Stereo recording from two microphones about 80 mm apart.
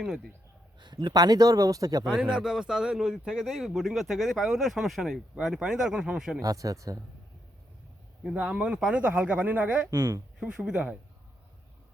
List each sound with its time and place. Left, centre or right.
0.8 s speech: right
2.1 s speech: centre
6.4 s speech: right
8.2 s speech: centre
9.9 s speech: right
10.4 s speech: centre